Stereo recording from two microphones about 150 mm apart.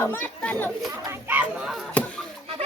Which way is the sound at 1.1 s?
10° right (ahead or behind).